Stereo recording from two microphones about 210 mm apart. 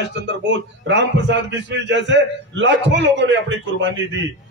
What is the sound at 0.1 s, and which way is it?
A man's voice, 60° right (ahead or behind).